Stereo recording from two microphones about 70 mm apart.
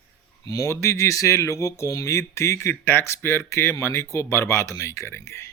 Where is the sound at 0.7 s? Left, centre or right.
Left.